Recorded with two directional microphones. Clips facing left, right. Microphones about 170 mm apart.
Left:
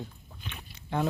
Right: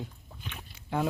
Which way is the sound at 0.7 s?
5° right (ahead or behind).